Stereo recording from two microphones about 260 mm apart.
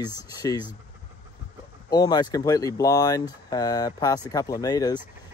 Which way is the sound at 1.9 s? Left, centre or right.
Centre.